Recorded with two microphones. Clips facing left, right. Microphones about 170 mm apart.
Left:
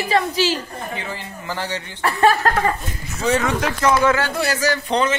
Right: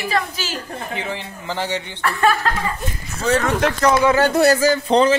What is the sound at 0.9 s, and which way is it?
A man's voice, 20° right (ahead or behind).